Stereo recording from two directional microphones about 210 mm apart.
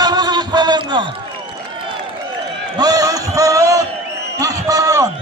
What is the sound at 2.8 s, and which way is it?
A man's voice, 15° right (ahead or behind).